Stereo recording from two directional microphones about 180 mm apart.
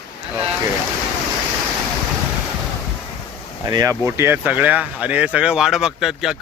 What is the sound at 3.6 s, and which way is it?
Speech, 20° right (ahead or behind).